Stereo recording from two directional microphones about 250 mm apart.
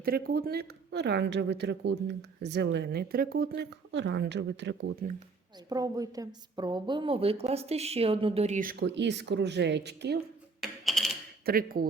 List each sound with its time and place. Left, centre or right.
0.0 s speech: right
5.6 s a woman's voice: centre; by 10.2 s right
10.6 s mechanisms: centre
11.4 s speech: right